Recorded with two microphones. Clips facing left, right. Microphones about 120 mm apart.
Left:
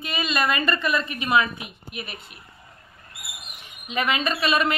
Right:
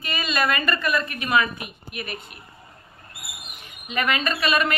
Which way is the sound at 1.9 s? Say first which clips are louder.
Right 3 dB; 55° right (ahead or behind).